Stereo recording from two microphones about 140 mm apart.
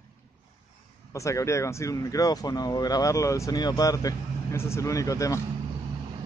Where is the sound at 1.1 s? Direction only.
20° left (ahead or behind).